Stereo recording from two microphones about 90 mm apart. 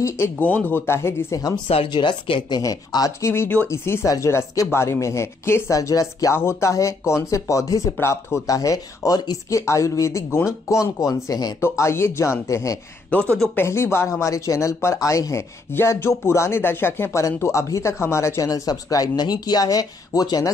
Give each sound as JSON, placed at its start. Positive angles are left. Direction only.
{"t": 0.4, "sound": "speech", "side_deg": 15}
{"t": 1.9, "sound": "speech", "side_deg": 60}
{"t": 2.5, "sound": "speech", "side_deg": 45}
{"t": 11.6, "sound": "speech", "side_deg": 30}